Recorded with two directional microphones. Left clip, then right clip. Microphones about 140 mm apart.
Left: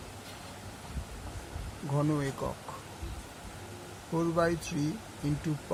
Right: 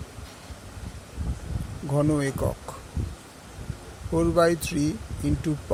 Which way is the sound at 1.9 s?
50° right (ahead or behind).